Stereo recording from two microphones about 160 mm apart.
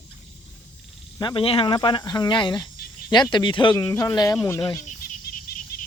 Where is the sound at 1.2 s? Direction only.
30° left (ahead or behind).